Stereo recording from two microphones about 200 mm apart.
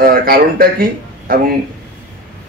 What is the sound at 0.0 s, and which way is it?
Speech, 45° right (ahead or behind).